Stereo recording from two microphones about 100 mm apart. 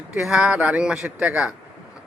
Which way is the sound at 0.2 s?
5° right (ahead or behind).